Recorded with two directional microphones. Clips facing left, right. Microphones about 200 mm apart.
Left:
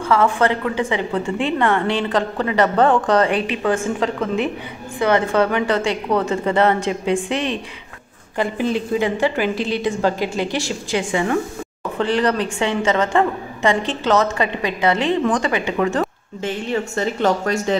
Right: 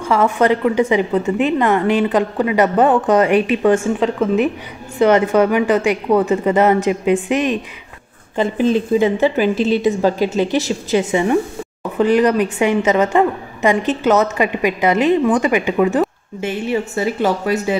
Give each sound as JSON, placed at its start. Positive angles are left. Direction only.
{"t": 0.0, "sound": "a woman's voice", "side_deg": -15}
{"t": 4.9, "sound": "a woman's voice", "side_deg": -20}
{"t": 5.3, "sound": "a woman's voice", "side_deg": -10}
{"t": 8.5, "sound": "a woman's voice", "side_deg": 15}
{"t": 8.9, "sound": "a woman's voice", "side_deg": -20}
{"t": 9.6, "sound": "a woman's voice", "side_deg": 20}
{"t": 10.3, "sound": "a woman's voice", "side_deg": -20}